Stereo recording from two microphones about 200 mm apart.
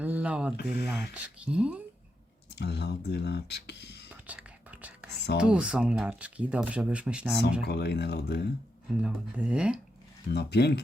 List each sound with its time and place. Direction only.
0.0 s speech: 5° right (ahead or behind)
2.6 s speech: 55° left (ahead or behind)
4.1 s whispering: 5° right (ahead or behind)
5.4 s speech: 5° right (ahead or behind)
7.6 s speech: 55° left (ahead or behind)
9.0 s speech: 5° right (ahead or behind)
10.3 s speech: 55° left (ahead or behind)